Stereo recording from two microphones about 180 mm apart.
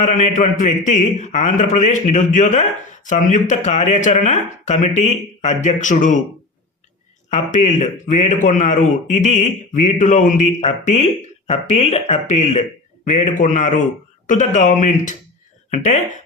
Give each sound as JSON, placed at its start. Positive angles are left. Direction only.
{"t": 0.0, "sound": "a man's voice", "side_deg": 40}
{"t": 7.3, "sound": "a man's voice", "side_deg": 40}